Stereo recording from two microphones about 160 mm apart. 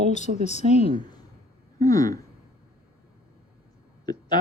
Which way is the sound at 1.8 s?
20° left (ahead or behind).